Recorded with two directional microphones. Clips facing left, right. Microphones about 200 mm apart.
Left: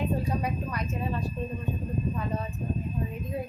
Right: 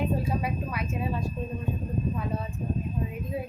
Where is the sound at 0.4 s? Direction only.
10° right (ahead or behind).